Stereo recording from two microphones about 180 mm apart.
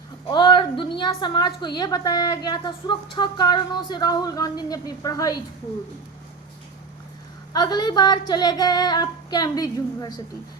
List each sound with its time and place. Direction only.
0.3 s a woman's voice: 25° left (ahead or behind)
7.5 s a woman's voice: 25° left (ahead or behind)